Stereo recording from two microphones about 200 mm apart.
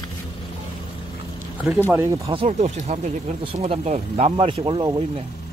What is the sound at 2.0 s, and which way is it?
Speech, 15° right (ahead or behind).